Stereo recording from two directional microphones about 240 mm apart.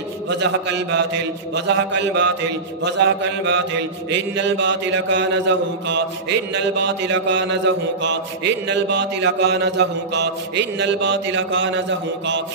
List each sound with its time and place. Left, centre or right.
0.3 s a man's voice: right